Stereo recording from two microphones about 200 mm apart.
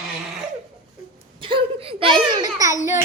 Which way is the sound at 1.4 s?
25° right (ahead or behind).